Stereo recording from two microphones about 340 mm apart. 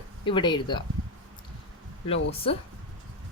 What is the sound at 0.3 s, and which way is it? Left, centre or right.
Speech, centre.